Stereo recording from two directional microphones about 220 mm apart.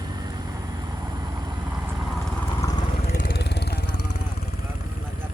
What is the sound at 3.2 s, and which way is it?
Vehicle, 50° left (ahead or behind).